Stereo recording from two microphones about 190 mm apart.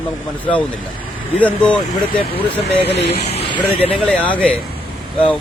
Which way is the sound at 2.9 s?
60° left (ahead or behind).